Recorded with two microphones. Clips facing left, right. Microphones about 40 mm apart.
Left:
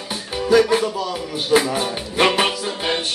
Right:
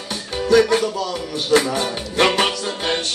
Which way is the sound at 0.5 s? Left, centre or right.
Centre.